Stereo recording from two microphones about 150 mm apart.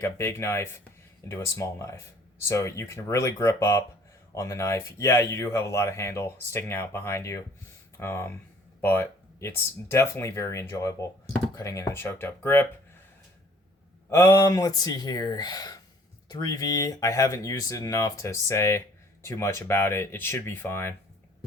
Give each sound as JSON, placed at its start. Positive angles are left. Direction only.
{"t": 0.0, "sound": "speech", "side_deg": 15}
{"t": 14.1, "sound": "speech", "side_deg": 20}